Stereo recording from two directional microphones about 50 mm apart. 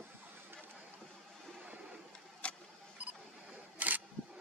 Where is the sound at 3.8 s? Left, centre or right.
Right.